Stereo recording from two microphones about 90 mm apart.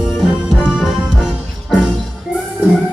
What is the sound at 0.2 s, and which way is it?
Music, 10° left (ahead or behind).